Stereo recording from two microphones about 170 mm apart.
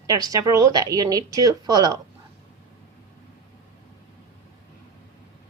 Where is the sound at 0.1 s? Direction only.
20° right (ahead or behind).